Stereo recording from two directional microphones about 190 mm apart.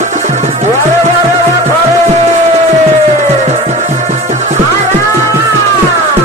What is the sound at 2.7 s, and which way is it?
Music, 40° right (ahead or behind).